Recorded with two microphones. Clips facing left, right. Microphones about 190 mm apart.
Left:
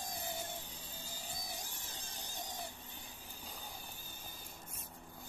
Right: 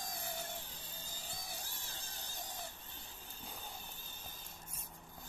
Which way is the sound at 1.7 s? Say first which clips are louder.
Left 1 dB; 15° left (ahead or behind).